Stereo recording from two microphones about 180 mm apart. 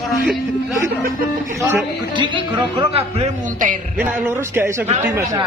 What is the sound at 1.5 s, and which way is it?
Speech, 15° right (ahead or behind).